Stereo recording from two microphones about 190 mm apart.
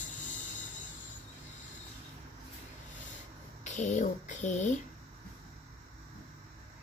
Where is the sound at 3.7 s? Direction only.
40° left (ahead or behind).